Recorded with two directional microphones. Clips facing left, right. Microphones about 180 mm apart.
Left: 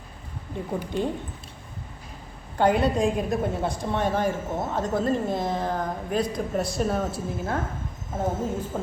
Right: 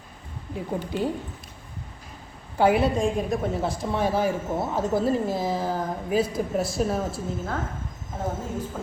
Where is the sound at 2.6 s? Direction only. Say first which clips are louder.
Right 1 dB; 5° right (ahead or behind).